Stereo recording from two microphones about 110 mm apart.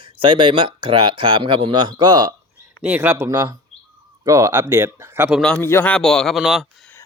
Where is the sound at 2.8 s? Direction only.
15° right (ahead or behind).